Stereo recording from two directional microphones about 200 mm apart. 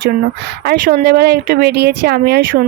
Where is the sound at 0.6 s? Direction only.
50° right (ahead or behind).